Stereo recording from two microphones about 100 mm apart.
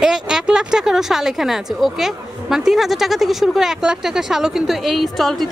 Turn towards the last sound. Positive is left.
turn(degrees=0)  # may be behind; listen again after turning